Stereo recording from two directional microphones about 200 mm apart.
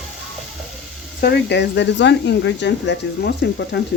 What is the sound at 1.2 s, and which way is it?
Speech, 55° left (ahead or behind).